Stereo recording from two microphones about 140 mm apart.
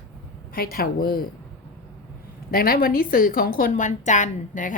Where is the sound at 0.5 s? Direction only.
90° left.